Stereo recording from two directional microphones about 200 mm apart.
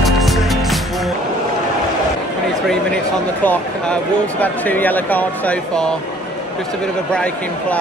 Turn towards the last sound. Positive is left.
turn(degrees=5)  # may be behind; listen again after turning